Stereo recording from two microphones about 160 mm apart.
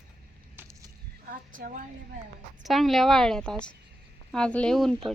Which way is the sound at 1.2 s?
60° right (ahead or behind).